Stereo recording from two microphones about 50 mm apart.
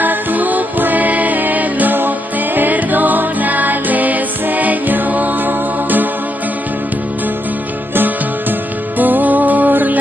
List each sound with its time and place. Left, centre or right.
0.0 s music: right
7.9 s music: right